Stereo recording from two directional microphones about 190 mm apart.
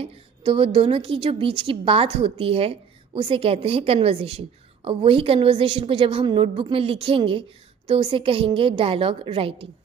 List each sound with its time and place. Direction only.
0.0 s a woman's voice: 30° right (ahead or behind)